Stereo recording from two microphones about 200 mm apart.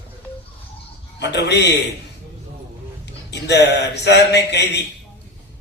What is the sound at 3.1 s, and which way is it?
A man's voice, 60° left (ahead or behind).